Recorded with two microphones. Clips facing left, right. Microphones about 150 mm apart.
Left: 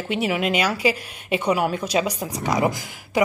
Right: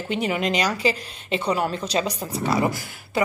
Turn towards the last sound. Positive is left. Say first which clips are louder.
# left 3 dB
turn(degrees=20)  # may be behind; listen again after turning